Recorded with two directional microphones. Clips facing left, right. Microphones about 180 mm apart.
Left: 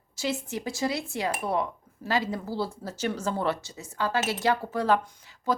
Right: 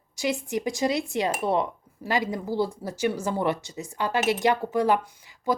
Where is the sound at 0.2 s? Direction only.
15° right (ahead or behind).